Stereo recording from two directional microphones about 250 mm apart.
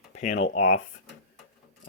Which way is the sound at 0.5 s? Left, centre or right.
Left.